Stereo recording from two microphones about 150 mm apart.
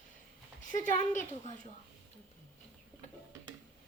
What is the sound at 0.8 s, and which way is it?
Speech, 60° left (ahead or behind).